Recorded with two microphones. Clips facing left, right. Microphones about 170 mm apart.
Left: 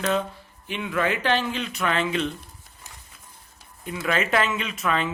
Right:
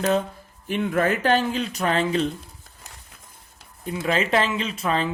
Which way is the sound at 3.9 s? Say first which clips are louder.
Right 2 dB; 30° right (ahead or behind).